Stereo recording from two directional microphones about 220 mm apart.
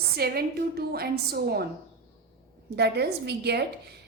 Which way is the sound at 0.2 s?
45° right (ahead or behind).